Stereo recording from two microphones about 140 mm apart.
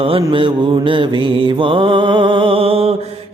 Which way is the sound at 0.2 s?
35° right (ahead or behind).